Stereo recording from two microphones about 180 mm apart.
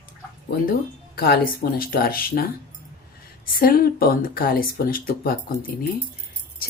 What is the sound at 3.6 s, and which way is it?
Speech, 55° left (ahead or behind).